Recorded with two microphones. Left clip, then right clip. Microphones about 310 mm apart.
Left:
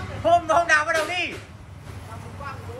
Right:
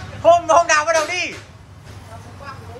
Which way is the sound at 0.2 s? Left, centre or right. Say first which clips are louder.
Right 6 dB; centre.